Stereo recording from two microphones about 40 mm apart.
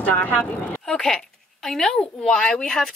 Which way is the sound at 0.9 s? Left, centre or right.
Centre.